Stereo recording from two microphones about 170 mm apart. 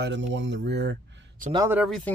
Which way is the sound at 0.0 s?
90° right.